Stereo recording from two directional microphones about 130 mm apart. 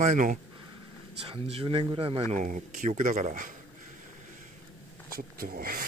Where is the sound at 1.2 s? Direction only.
50° right (ahead or behind).